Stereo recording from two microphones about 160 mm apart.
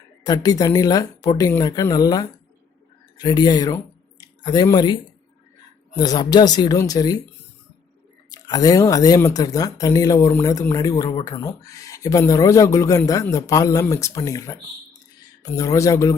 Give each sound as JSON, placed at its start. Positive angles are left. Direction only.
{"t": 0.3, "sound": "speech", "side_deg": 25}
{"t": 6.0, "sound": "speech", "side_deg": 25}
{"t": 8.3, "sound": "speech", "side_deg": 25}